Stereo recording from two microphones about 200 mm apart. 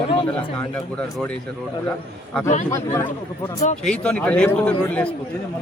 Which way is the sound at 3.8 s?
5° left (ahead or behind).